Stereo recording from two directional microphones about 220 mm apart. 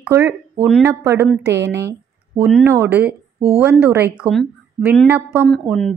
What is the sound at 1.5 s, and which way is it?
Speech, 50° right (ahead or behind).